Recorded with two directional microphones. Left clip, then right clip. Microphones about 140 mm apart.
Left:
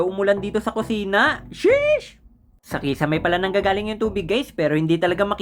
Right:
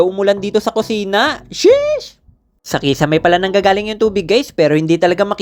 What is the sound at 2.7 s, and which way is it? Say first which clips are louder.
Speech: right 8 dB; 35° right (ahead or behind).